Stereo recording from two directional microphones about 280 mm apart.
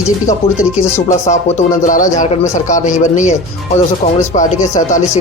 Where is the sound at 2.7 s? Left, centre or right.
Left.